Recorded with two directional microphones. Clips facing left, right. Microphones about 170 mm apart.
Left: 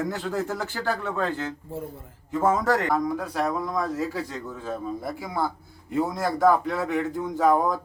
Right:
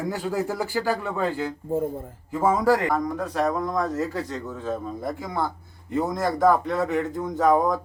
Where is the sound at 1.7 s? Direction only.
50° right (ahead or behind).